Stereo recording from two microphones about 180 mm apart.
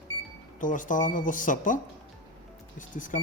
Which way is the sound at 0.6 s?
45° left (ahead or behind).